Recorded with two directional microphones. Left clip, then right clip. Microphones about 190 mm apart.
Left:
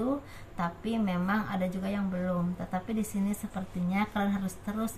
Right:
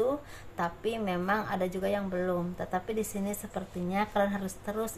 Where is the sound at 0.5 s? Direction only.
35° right (ahead or behind).